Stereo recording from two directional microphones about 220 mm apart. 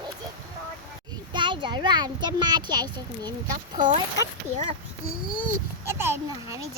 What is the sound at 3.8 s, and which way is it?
Speech, 20° right (ahead or behind).